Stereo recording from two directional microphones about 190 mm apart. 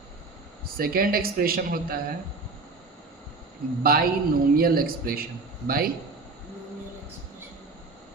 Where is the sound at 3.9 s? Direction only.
50° right (ahead or behind).